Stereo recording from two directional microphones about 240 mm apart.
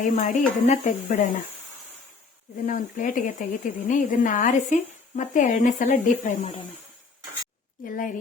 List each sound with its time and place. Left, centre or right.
0.0 s speech: left
2.6 s speech: left
7.9 s speech: left